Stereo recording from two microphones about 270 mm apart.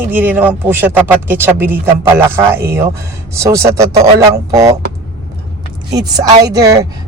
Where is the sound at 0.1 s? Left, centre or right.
Centre.